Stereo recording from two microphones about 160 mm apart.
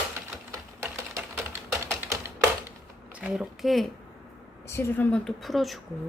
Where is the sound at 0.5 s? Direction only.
20° right (ahead or behind).